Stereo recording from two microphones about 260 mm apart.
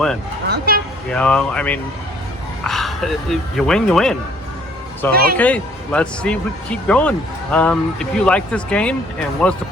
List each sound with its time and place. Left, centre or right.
0.4 s speech: right
1.1 s speech: centre
5.1 s speech: right
5.4 s speech: centre